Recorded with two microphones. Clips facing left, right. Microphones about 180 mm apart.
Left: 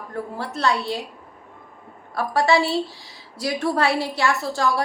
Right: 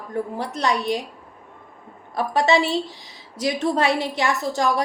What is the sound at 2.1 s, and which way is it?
A woman's voice, 20° right (ahead or behind).